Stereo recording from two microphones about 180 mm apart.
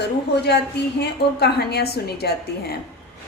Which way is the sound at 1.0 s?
65° left (ahead or behind).